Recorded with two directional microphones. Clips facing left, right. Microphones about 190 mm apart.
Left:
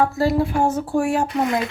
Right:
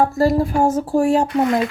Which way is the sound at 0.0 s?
45° right (ahead or behind).